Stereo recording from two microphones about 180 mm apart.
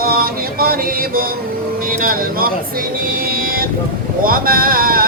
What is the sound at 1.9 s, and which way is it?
Speech, 50° right (ahead or behind).